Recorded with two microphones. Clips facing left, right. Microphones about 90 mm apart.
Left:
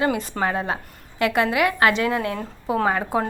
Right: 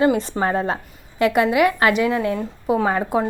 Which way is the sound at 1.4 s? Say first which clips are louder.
Right 2 dB; 20° right (ahead or behind).